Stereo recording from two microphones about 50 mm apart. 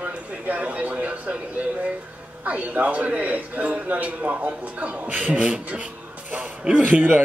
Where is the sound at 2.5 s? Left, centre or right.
Right.